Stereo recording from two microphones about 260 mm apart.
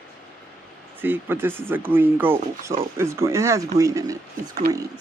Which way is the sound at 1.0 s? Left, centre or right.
Centre.